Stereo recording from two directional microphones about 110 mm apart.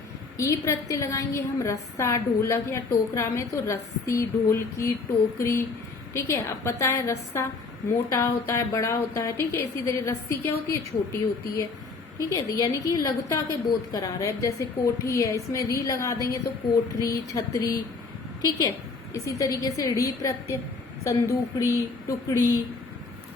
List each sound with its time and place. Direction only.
0.3 s a woman's voice: 30° left (ahead or behind)
19.1 s a woman's voice: 30° left (ahead or behind)